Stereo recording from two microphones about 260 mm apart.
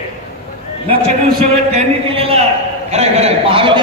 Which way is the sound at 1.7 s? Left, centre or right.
Right.